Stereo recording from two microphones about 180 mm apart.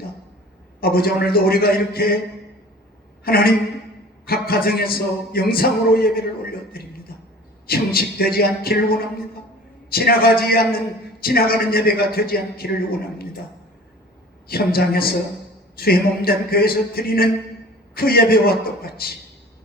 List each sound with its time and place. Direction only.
0.8 s a man's voice: 60° left (ahead or behind)
3.2 s a man's voice: 55° left (ahead or behind)
7.1 s a sound: 55° left (ahead or behind)
7.7 s a man's voice: 55° left (ahead or behind)
14.4 s a man's voice: 55° left (ahead or behind)